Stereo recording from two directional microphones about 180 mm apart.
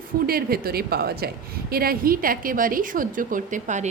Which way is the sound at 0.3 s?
55° right (ahead or behind).